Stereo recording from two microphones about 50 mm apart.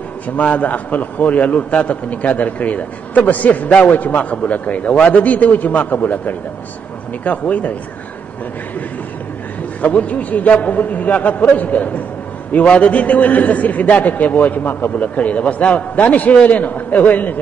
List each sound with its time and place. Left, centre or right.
0.4 s a man's voice: left
9.8 s a man's voice: left
15.0 s a man's voice: left